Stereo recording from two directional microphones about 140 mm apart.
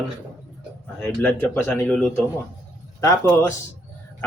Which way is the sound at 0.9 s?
10° left (ahead or behind).